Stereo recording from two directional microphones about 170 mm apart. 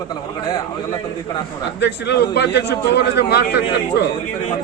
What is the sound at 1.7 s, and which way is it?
A man's voice, 80° left.